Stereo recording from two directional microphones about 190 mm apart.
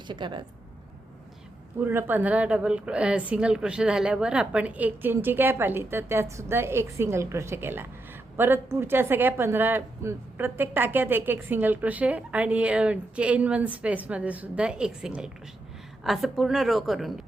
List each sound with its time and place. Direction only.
0.1 s speech: 25° right (ahead or behind)
1.8 s a woman's voice: 10° right (ahead or behind)